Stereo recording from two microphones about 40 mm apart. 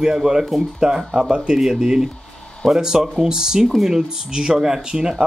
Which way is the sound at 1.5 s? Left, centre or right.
Centre.